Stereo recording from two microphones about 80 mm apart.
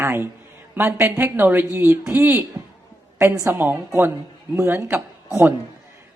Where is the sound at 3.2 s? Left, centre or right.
Right.